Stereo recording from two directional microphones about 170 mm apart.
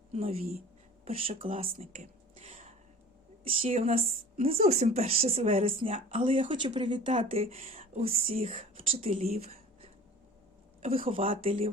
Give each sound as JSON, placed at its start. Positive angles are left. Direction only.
{"t": 0.1, "sound": "speech", "side_deg": -35}
{"t": 2.4, "sound": "a sound", "side_deg": -45}
{"t": 3.7, "sound": "speech", "side_deg": -40}
{"t": 7.1, "sound": "speech", "side_deg": -40}
{"t": 11.0, "sound": "speech", "side_deg": -35}